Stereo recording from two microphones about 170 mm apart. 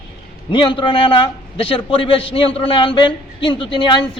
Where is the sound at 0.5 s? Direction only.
30° left (ahead or behind).